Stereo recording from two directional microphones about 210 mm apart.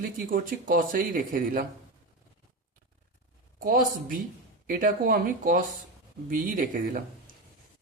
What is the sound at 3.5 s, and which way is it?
Speech, 40° right (ahead or behind).